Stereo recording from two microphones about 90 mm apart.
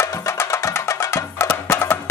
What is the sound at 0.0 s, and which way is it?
Music, 35° left (ahead or behind).